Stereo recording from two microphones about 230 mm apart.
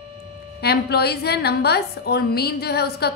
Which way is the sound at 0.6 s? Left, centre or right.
Left.